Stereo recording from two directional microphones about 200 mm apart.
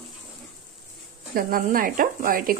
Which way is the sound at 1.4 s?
45° right (ahead or behind).